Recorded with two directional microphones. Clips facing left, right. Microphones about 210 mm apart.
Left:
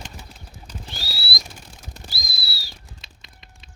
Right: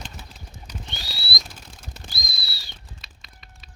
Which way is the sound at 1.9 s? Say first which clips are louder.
Left 2 dB; 5° left (ahead or behind).